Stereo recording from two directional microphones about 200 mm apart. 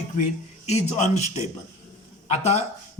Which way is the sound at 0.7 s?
35° left (ahead or behind).